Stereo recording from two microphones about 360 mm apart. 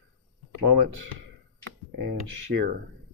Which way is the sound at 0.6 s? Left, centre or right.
Right.